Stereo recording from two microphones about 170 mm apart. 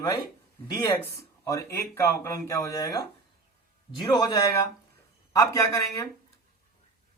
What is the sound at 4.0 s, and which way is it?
Speech, 25° left (ahead or behind).